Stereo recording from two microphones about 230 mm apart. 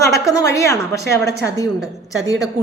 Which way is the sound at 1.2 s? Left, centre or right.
Right.